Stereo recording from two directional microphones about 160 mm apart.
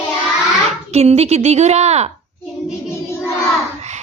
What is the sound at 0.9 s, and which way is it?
A woman's voice, 40° right (ahead or behind).